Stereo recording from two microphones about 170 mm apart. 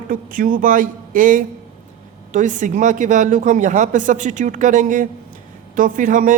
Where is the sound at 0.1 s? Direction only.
55° right (ahead or behind).